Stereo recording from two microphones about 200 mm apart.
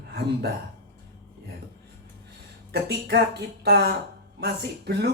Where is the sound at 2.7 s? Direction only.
55° right (ahead or behind).